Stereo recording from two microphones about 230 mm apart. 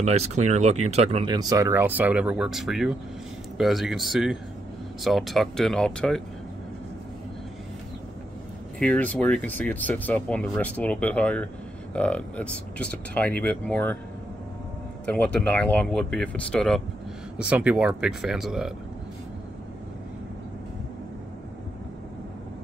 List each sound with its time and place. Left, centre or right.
0.0 s speech: right; by 6.2 s centre
8.7 s speech: centre
15.0 s speech: centre